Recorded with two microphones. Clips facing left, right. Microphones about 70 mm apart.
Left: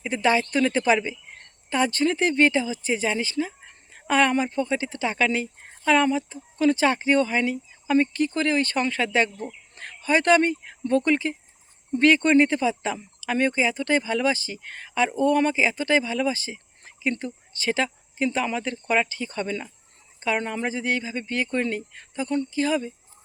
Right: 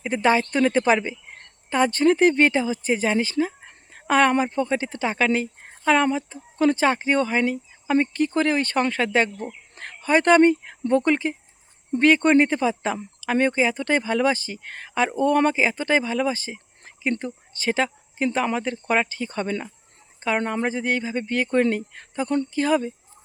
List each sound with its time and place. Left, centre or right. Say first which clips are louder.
0.0 s speech: right 2 dB; right
8.1 s speech: right 2 dB; right
9.4 s speech: right 2 dB; right